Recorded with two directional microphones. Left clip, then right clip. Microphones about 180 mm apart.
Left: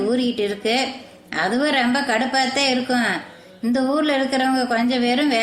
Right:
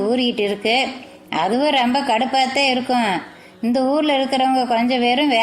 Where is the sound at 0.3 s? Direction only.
20° right (ahead or behind).